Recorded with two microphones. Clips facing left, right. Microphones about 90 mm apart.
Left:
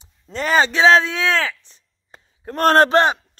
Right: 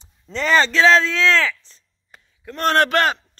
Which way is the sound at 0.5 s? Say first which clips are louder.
Left 1 dB; 15° left (ahead or behind).